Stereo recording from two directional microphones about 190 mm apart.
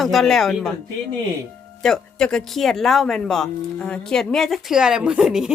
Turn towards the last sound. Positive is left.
turn(degrees=-5)  # may be behind; listen again after turning